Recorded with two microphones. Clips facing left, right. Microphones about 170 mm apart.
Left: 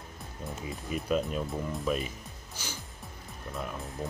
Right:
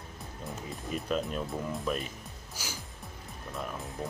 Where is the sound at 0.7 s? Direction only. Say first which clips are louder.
Left 3 dB; 5° left (ahead or behind).